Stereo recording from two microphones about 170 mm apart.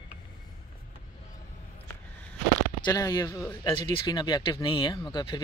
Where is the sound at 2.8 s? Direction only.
25° left (ahead or behind).